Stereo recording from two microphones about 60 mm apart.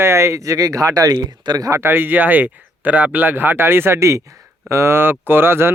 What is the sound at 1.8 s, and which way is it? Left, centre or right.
Speech, right.